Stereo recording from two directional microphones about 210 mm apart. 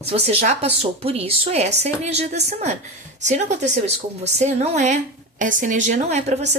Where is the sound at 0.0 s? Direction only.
30° right (ahead or behind).